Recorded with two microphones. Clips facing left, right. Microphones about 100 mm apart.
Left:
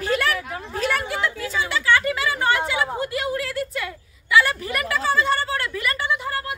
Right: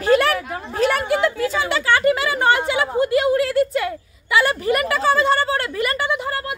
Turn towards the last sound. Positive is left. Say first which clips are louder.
# right 4 dB
turn(degrees=-60)  # may be behind; listen again after turning